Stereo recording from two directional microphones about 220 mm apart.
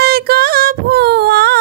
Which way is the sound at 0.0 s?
45° right (ahead or behind).